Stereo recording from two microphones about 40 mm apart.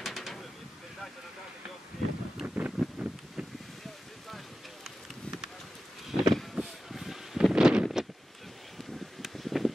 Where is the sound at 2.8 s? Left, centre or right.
Centre.